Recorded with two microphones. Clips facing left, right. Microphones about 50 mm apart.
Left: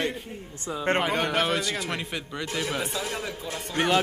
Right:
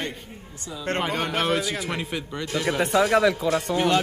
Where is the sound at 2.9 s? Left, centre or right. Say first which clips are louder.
Right 13 dB; right.